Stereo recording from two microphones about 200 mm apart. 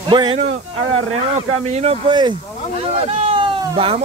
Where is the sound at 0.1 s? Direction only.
25° right (ahead or behind).